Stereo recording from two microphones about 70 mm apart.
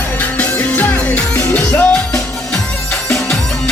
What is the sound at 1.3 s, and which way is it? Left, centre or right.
Music, left.